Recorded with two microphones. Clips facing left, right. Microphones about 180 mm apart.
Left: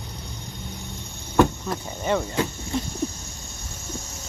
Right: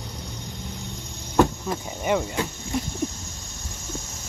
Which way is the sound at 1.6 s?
10° right (ahead or behind).